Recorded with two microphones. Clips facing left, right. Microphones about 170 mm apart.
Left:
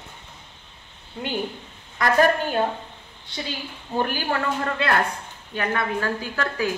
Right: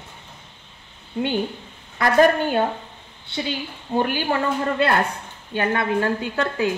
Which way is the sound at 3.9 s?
20° right (ahead or behind).